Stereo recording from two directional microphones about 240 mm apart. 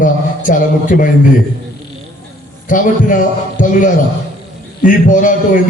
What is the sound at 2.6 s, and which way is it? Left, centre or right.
A man's voice, left.